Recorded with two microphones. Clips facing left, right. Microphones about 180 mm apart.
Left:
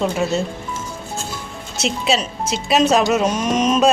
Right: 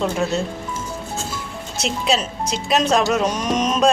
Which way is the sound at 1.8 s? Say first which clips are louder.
Left 1 dB; centre (ahead or behind).